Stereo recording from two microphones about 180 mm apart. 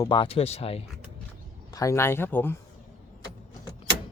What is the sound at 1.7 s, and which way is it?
Speech, 20° left (ahead or behind).